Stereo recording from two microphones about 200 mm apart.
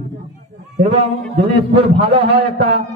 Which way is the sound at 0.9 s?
30° right (ahead or behind).